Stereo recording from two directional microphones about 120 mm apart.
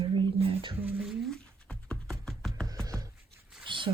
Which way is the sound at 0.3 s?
50° right (ahead or behind).